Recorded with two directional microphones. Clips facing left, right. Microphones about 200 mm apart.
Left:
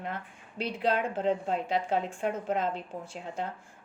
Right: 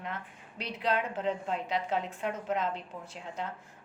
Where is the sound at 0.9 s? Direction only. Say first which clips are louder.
Left 3 dB; 35° left (ahead or behind).